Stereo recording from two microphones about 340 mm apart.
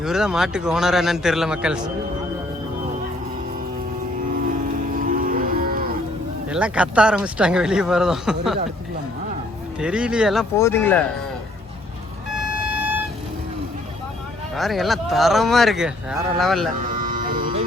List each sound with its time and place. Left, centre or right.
0.0 s speech: centre
4.9 s livestock: right
6.5 s speech: centre
9.8 s speech: centre
14.5 s speech: centre
16.7 s music: right